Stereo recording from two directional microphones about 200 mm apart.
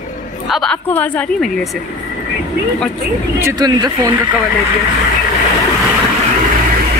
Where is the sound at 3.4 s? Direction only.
20° right (ahead or behind).